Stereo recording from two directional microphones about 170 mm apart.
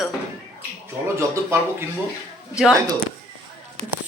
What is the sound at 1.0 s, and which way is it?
Speech, 15° right (ahead or behind).